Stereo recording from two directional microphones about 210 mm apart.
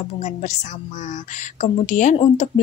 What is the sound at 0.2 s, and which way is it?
A woman's voice, 35° left (ahead or behind).